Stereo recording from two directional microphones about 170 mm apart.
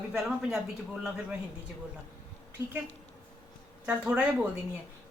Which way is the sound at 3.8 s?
5° right (ahead or behind).